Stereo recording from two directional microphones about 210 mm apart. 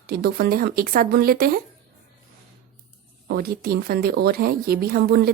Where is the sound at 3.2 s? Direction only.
45° right (ahead or behind).